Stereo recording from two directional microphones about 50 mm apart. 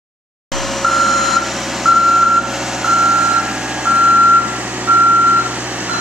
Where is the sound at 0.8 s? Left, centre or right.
Centre; by 4.2 s right.